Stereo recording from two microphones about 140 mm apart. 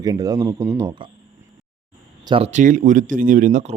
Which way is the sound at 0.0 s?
25° right (ahead or behind).